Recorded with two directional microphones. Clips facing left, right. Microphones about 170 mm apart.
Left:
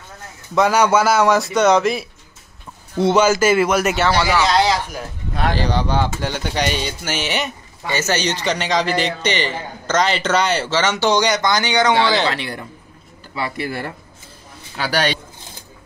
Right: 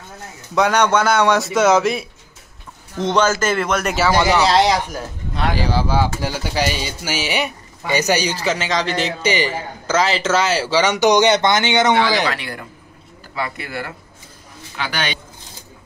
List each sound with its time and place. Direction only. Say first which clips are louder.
0.6 s a man's voice: left 1 dB; 5° left (ahead or behind)
4.2 s speech: right 4 dB; 20° right (ahead or behind)
5.5 s speech: even; 5° right (ahead or behind); by 11.9 s 25° right (ahead or behind)
12.3 s speech: left 1 dB; 25° left (ahead or behind)
14.8 s speech: left 4 dB; 35° left (ahead or behind)